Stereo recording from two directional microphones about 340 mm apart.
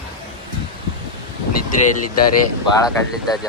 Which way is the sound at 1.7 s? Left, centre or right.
Left.